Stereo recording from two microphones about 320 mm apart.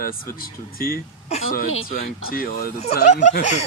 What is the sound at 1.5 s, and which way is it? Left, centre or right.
Speech, left.